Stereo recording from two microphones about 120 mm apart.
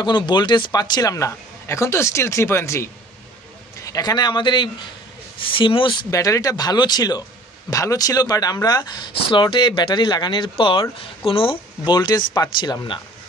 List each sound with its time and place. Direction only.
0.0 s a man's voice: 40° left (ahead or behind)
6.0 s speech: 30° left (ahead or behind)